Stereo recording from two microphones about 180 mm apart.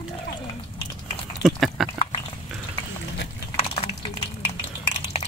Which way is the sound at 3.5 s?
35° left (ahead or behind).